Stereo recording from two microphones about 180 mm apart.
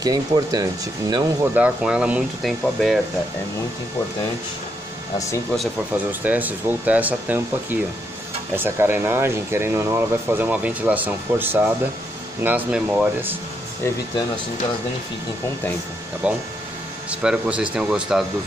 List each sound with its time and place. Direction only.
0.0 s speech: 20° right (ahead or behind)
1.5 s speech: 5° right (ahead or behind)
6.2 s speech: 10° right (ahead or behind)
16.2 s speech: 5° right (ahead or behind)